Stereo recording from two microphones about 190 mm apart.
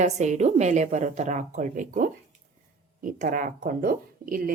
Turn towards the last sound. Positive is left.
turn(degrees=-45)  # may be behind; listen again after turning